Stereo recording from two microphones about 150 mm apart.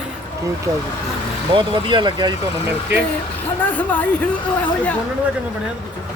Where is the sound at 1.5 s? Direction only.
35° right (ahead or behind).